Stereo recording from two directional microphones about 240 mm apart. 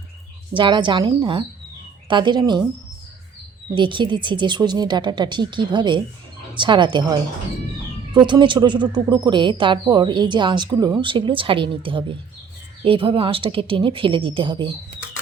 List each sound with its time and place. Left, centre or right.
0.5 s speech: centre
3.8 s speech: centre